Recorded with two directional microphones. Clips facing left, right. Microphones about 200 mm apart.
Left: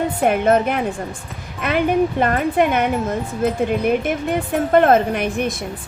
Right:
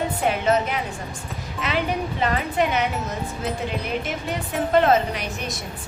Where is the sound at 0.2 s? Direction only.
55° left (ahead or behind).